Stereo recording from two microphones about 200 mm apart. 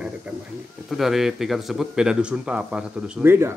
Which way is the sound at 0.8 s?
Centre (ahead or behind).